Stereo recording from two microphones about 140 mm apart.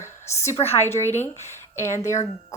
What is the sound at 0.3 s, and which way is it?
A woman's voice, 20° left (ahead or behind).